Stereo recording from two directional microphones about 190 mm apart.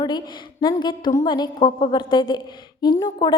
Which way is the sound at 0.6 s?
20° left (ahead or behind).